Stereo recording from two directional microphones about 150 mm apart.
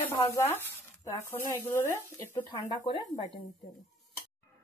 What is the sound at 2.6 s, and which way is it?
Speech, 30° left (ahead or behind).